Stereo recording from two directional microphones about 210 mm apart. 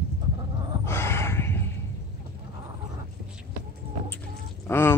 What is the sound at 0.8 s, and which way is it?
Gasp, 10° left (ahead or behind).